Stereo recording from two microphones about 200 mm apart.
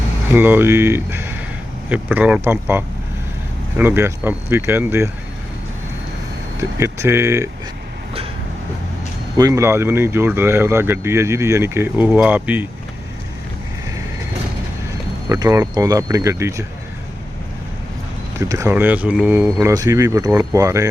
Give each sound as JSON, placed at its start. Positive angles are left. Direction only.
{"t": 0.3, "sound": "speech", "side_deg": -10}
{"t": 6.7, "sound": "speech", "side_deg": -15}
{"t": 9.4, "sound": "speech", "side_deg": -15}
{"t": 15.3, "sound": "speech", "side_deg": -15}
{"t": 18.3, "sound": "speech", "side_deg": -15}